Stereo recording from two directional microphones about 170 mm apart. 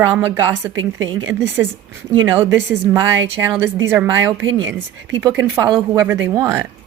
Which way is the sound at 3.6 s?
15° right (ahead or behind).